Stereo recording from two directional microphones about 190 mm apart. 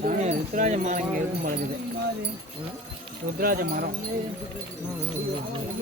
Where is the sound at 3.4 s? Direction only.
50° right (ahead or behind).